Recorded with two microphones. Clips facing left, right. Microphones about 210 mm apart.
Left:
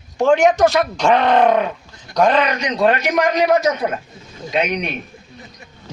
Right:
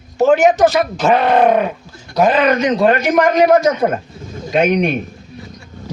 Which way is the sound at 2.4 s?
50° right (ahead or behind).